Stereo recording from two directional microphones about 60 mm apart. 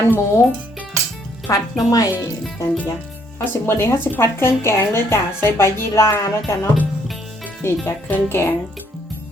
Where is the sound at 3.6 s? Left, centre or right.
Left.